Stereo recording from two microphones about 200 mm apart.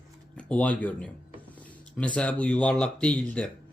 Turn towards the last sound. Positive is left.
turn(degrees=5)  # may be behind; listen again after turning